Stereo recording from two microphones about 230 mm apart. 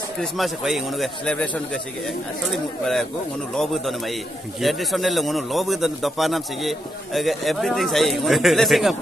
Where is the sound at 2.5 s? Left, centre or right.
Centre.